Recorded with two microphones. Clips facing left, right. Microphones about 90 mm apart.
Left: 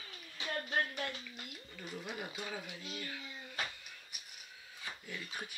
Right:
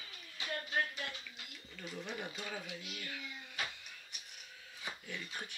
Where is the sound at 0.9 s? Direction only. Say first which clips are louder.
Left 4 dB; 50° left (ahead or behind).